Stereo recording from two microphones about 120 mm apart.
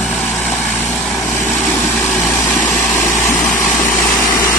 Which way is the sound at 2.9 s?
20° left (ahead or behind).